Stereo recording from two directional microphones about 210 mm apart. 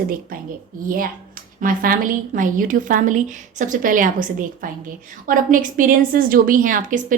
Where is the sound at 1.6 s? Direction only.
40° right (ahead or behind).